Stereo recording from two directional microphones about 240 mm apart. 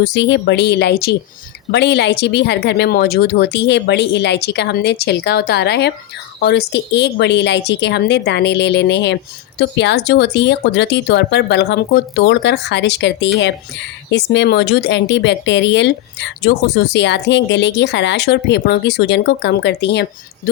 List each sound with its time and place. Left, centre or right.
0.0 s speech: left